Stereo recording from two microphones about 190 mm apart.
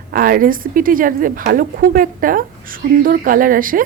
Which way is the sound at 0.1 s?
50° right (ahead or behind).